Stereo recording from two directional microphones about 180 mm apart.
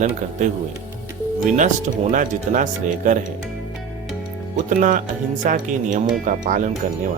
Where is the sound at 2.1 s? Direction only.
45° right (ahead or behind).